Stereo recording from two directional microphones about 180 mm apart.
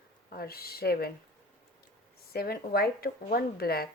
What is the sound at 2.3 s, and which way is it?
A woman's voice, 55° left (ahead or behind).